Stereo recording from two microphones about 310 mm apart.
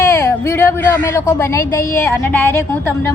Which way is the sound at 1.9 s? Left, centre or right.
Centre.